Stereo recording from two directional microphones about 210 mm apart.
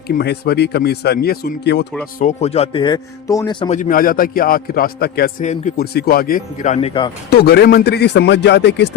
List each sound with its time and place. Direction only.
0.1 s speech: 50° left (ahead or behind)
2.1 s speech: 35° left (ahead or behind)
3.7 s speech: 40° left (ahead or behind)
7.3 s speech: 50° left (ahead or behind)